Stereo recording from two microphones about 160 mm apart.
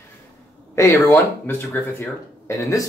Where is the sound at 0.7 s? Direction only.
20° left (ahead or behind).